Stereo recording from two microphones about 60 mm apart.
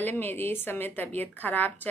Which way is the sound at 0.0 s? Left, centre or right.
Left.